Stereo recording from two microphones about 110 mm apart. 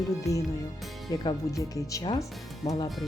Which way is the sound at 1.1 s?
35° left (ahead or behind).